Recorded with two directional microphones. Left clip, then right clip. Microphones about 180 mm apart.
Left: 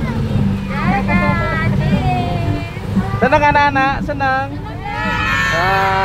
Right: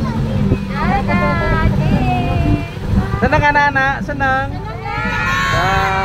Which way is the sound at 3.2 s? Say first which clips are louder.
Left 1 dB; 15° left (ahead or behind).